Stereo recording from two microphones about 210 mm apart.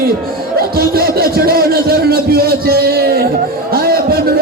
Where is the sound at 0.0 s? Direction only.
45° right (ahead or behind).